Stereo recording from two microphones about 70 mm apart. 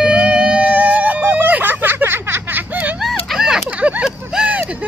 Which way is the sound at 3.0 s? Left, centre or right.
Centre.